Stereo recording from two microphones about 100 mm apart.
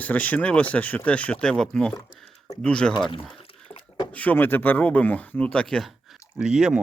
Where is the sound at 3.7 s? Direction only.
25° left (ahead or behind).